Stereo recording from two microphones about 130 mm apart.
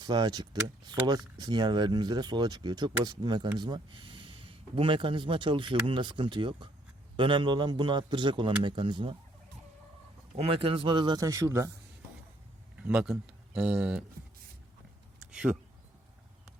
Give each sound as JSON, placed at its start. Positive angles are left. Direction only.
{"t": 0.0, "sound": "speech", "side_deg": -35}
{"t": 10.3, "sound": "speech", "side_deg": -45}
{"t": 12.7, "sound": "speech", "side_deg": -10}
{"t": 15.3, "sound": "speech", "side_deg": -5}